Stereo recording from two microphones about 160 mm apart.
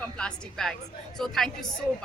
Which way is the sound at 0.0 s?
5° left (ahead or behind).